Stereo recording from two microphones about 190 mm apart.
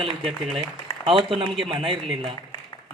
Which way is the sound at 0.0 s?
30° right (ahead or behind).